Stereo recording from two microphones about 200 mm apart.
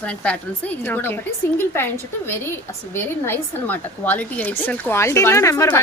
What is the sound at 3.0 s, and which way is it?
A woman's voice, 10° left (ahead or behind).